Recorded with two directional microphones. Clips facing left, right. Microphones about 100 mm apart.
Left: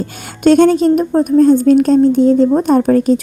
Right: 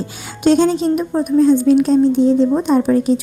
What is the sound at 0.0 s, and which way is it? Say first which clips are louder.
A woman's voice: left 3 dB; 50° left (ahead or behind).